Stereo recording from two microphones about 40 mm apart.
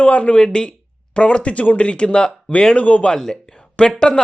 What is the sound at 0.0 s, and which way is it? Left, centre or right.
Speech, left.